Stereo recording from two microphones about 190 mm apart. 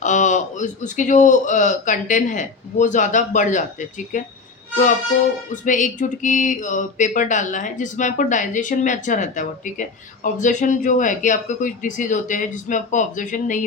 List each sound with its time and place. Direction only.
0.0 s a man's voice: 40° left (ahead or behind)
5.6 s a man's voice: 40° left (ahead or behind)